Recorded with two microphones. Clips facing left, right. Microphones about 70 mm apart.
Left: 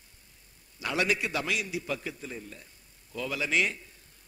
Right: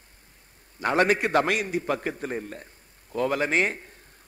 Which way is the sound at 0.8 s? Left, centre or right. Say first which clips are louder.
Right 7 dB; right.